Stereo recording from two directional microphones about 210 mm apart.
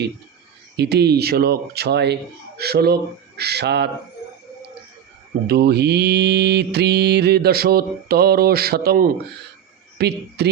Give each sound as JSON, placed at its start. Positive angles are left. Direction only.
{"t": 0.8, "sound": "mantra", "side_deg": -50}
{"t": 5.5, "sound": "mantra", "side_deg": -50}